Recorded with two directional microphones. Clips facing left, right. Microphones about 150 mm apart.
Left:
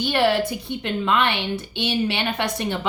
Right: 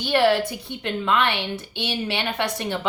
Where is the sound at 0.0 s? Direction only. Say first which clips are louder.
Right 1 dB; 20° left (ahead or behind).